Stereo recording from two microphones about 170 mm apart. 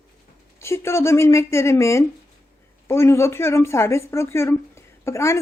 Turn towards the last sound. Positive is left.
turn(degrees=15)  # may be behind; listen again after turning